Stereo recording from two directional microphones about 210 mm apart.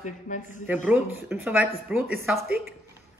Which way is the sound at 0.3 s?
40° left (ahead or behind).